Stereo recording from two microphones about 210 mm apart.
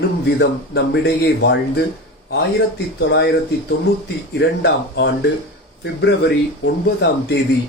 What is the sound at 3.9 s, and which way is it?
Speech, 50° left (ahead or behind).